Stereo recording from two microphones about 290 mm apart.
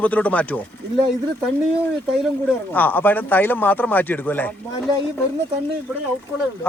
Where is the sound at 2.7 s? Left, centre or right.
Centre.